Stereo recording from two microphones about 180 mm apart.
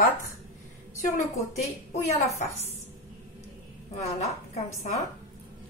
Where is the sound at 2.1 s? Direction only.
35° left (ahead or behind).